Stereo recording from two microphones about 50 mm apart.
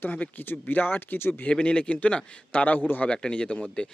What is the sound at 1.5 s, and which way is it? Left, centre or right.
Speech, left.